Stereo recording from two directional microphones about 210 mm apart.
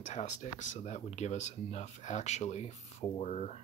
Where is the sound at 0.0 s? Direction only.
35° left (ahead or behind).